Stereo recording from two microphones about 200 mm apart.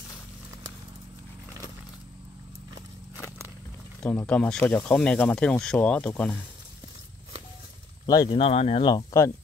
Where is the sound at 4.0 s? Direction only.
5° left (ahead or behind).